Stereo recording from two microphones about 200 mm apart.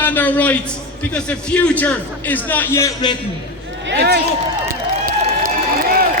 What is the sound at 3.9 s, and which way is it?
Speech, 55° right (ahead or behind).